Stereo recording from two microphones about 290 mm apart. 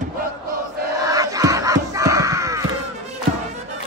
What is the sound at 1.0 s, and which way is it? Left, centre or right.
Battle cry, centre.